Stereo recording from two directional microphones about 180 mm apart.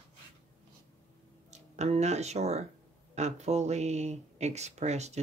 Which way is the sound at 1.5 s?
40° right (ahead or behind).